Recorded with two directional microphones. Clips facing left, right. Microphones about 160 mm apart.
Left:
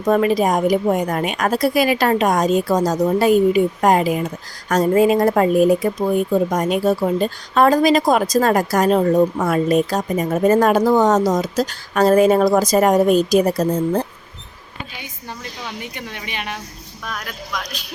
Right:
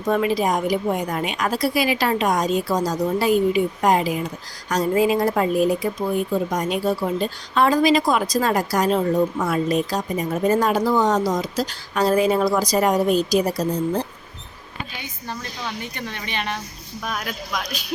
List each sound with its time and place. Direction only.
0.0 s speech: 45° left (ahead or behind)
15.8 s speech: 10° left (ahead or behind)
17.0 s speech: 10° right (ahead or behind)